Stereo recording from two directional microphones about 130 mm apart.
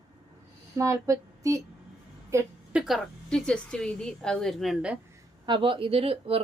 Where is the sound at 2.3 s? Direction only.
20° right (ahead or behind).